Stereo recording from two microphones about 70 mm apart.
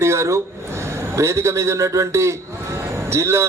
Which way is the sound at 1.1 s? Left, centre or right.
Right.